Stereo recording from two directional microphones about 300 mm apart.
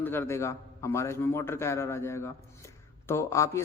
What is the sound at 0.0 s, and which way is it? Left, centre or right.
A man's voice, centre.